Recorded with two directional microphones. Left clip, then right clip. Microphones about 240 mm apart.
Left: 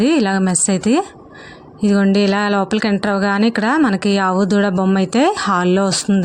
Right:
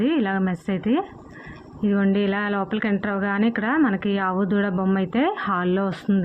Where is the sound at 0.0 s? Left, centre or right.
Left.